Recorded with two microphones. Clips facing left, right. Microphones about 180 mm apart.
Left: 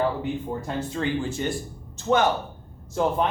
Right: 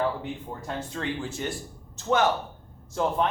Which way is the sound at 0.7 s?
5° left (ahead or behind).